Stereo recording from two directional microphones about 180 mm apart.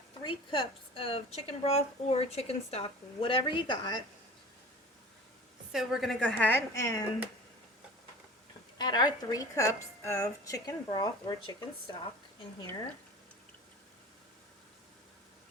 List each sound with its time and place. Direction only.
0.2 s speech: 30° left (ahead or behind)
5.7 s a woman's voice: centre (ahead or behind)
6.7 s a woman's voice: 20° left (ahead or behind)
8.8 s a woman's voice: 25° left (ahead or behind)